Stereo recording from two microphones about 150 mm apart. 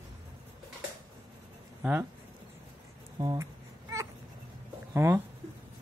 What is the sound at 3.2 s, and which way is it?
Speech, 25° right (ahead or behind).